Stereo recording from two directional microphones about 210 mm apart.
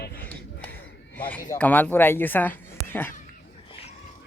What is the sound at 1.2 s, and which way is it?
Speech, 10° left (ahead or behind).